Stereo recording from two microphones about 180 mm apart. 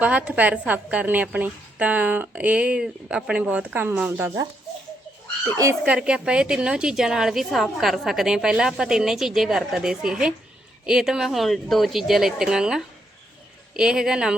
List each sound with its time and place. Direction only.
0.0 s a woman's voice: 5° right (ahead or behind)
5.5 s speech: 20° right (ahead or behind)
5.8 s a woman's voice: 5° right (ahead or behind)